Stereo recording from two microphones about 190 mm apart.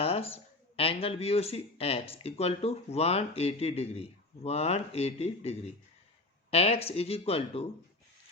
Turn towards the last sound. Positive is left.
turn(degrees=30)  # may be behind; listen again after turning